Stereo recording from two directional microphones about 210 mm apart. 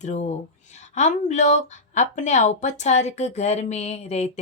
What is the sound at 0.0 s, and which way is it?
Speech, 30° left (ahead or behind).